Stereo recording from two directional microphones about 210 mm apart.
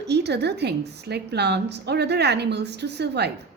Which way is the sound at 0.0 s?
55° right (ahead or behind).